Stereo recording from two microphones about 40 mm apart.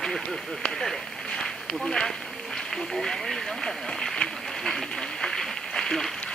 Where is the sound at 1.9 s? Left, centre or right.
Centre.